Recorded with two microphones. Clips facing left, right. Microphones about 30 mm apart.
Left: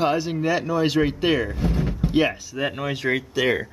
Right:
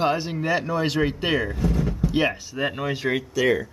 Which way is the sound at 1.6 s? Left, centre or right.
Left.